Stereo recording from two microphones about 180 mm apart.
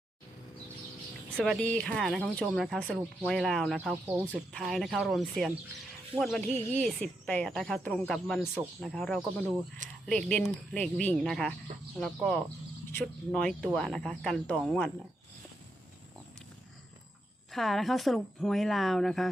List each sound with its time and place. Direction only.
1.5 s speech: 5° left (ahead or behind)
4.0 s speech: 10° right (ahead or behind)
4.5 s speech: centre (ahead or behind)
6.5 s speech: 35° right (ahead or behind)
6.8 s speech: 5° left (ahead or behind)
17.5 s speech: centre (ahead or behind)